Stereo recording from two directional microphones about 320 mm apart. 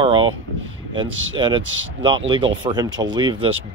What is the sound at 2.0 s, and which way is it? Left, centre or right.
Speech, centre.